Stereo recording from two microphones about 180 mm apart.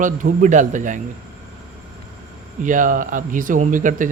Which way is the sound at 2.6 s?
45° right (ahead or behind).